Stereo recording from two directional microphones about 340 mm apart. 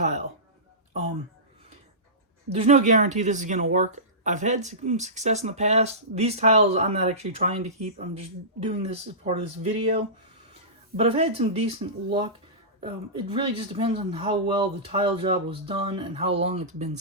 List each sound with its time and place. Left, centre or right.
0.0 s a sound: right
2.5 s speech: centre
10.9 s speech: centre